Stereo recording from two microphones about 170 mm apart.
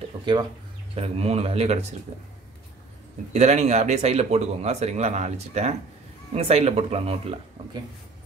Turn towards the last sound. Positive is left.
turn(degrees=-35)  # may be behind; listen again after turning